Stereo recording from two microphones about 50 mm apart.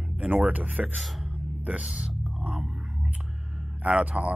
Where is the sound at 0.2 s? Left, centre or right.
Right.